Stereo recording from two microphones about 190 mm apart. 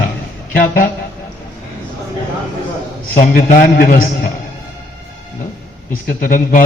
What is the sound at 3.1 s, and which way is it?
A man's voice, 50° left (ahead or behind).